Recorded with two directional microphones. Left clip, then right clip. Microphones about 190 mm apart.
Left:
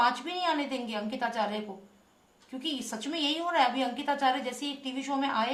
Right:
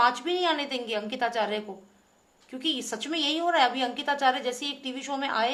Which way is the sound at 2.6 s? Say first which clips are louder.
Right 5 dB; 45° right (ahead or behind).